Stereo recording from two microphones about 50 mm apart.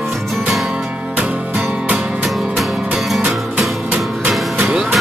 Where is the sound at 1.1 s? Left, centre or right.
Right.